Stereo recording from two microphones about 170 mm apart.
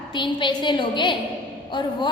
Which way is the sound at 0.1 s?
30° left (ahead or behind).